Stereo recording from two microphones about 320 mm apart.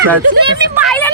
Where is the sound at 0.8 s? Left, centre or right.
Centre.